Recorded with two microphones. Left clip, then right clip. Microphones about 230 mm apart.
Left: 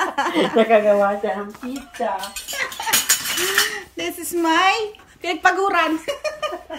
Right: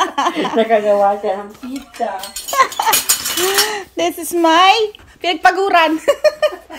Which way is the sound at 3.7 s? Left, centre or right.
Centre.